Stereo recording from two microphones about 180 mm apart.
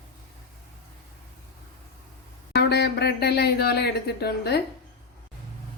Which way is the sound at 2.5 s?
65° left (ahead or behind).